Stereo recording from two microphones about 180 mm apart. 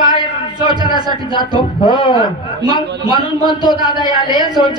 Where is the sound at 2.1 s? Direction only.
20° right (ahead or behind).